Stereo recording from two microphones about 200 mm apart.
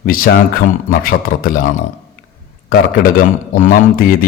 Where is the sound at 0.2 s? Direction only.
45° left (ahead or behind).